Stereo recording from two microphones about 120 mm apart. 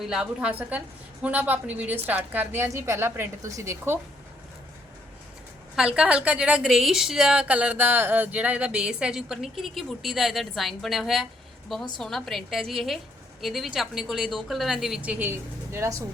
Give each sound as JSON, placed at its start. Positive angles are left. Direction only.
{"t": 0.0, "sound": "a woman's voice", "side_deg": -5}
{"t": 5.7, "sound": "a woman's voice", "side_deg": -10}